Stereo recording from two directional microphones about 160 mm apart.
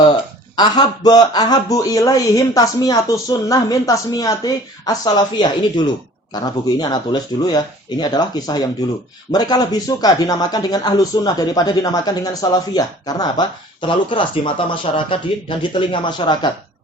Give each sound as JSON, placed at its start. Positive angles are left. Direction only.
{"t": 0.5, "sound": "speech", "side_deg": 25}